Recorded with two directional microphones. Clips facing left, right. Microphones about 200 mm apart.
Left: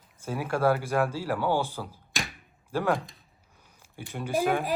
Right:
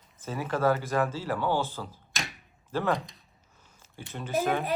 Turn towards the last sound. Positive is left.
turn(degrees=10)  # may be behind; listen again after turning